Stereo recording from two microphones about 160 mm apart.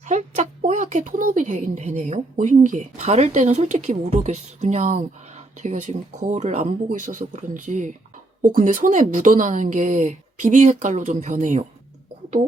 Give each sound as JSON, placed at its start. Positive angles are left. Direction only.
{"t": 0.1, "sound": "speech", "side_deg": -50}